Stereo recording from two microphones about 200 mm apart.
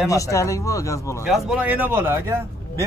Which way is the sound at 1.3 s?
5° right (ahead or behind).